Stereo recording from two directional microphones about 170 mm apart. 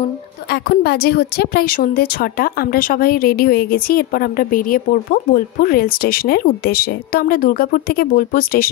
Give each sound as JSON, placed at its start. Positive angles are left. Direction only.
{"t": 0.5, "sound": "a woman's voice", "side_deg": 65}